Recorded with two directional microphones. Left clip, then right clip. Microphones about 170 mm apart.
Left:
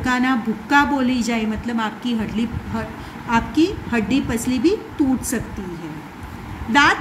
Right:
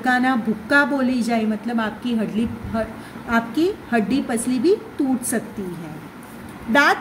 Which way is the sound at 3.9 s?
40° right (ahead or behind).